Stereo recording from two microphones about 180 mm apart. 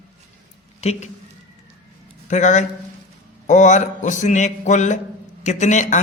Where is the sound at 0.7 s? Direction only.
35° left (ahead or behind).